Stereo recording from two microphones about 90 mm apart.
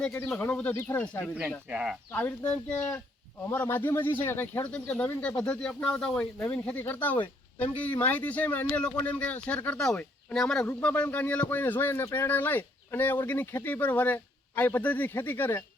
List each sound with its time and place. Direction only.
0.3 s speech: 20° left (ahead or behind)
1.7 s speech: 10° right (ahead or behind)
2.1 s a man's voice: 15° left (ahead or behind)
4.7 s a man's voice: 15° left (ahead or behind)
6.4 s a man's voice: 15° left (ahead or behind)
10.7 s speech: 20° left (ahead or behind)